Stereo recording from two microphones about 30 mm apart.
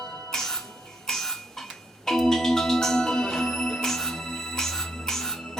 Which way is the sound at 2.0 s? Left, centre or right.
Centre.